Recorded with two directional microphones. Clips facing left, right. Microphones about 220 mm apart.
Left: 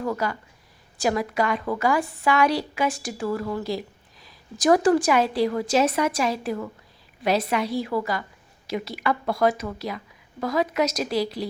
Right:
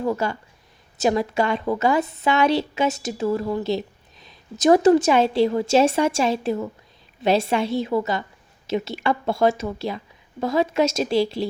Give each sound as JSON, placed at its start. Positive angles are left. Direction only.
{"t": 0.0, "sound": "a woman's voice", "side_deg": -25}